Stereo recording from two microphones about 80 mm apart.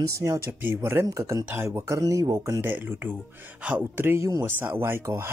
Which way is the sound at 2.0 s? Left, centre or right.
Right.